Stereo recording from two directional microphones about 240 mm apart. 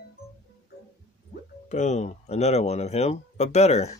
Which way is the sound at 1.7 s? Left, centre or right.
Left.